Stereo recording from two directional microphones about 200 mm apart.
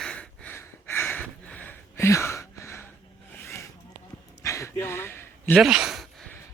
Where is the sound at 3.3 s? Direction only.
10° left (ahead or behind).